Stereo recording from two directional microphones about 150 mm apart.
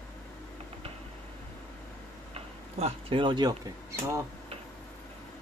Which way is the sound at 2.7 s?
40° right (ahead or behind).